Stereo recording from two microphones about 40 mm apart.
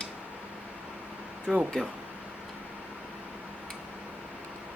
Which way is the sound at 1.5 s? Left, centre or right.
Centre.